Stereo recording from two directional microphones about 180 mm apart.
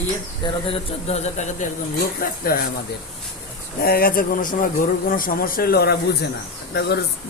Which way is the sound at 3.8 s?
55° left (ahead or behind).